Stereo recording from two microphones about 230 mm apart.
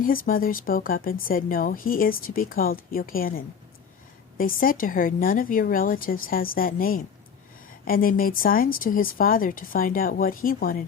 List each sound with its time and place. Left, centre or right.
0.0 s speech: left